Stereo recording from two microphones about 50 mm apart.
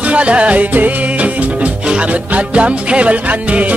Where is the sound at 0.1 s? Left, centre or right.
Right.